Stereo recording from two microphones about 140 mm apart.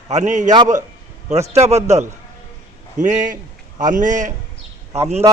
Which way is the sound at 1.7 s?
50° right (ahead or behind).